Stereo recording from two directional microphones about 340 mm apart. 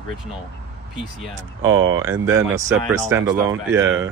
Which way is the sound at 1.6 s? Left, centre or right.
Right.